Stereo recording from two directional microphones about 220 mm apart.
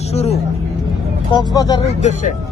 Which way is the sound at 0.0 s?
30° left (ahead or behind).